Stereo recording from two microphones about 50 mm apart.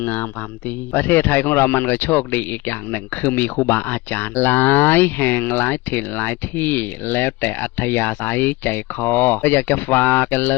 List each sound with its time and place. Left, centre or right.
0.0 s speech: left